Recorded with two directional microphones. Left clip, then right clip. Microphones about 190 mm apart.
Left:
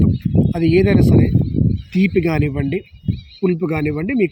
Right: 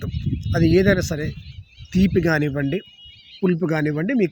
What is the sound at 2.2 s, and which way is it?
Speech, 5° right (ahead or behind).